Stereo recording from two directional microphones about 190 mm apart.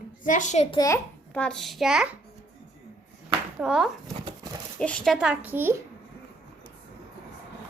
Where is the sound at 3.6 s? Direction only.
5° right (ahead or behind).